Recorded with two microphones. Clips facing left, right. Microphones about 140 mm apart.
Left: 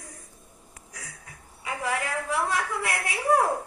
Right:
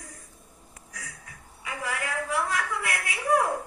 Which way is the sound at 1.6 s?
25° left (ahead or behind).